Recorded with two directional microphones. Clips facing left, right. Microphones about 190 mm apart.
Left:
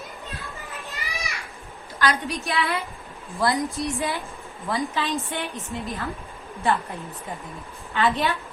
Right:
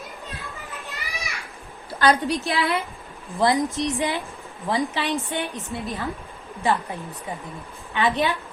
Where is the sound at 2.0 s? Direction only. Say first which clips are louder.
Right 5 dB; 30° right (ahead or behind).